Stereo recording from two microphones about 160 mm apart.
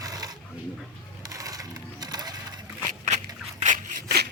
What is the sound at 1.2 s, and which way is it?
Music, 20° right (ahead or behind).